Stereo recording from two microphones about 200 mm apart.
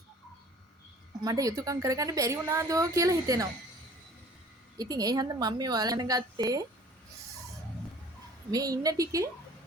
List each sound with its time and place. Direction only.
1.2 s a woman's voice: 15° right (ahead or behind)
4.8 s a woman's voice: 20° right (ahead or behind)
8.4 s a woman's voice: 20° right (ahead or behind)